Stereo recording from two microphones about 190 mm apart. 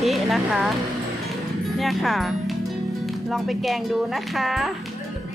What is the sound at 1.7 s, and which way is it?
Speech, centre (ahead or behind).